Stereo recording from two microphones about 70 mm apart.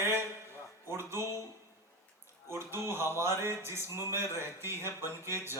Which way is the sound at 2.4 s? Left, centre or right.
Right.